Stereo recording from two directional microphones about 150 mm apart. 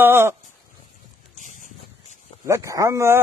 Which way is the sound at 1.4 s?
60° left (ahead or behind).